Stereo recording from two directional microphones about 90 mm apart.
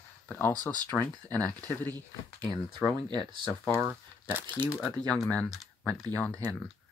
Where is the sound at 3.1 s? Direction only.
55° right (ahead or behind).